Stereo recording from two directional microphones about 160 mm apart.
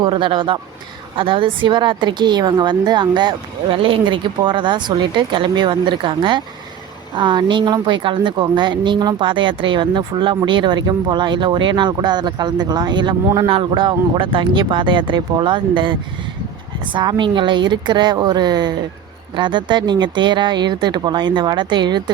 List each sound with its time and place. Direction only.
0.0 s speech: 30° right (ahead or behind)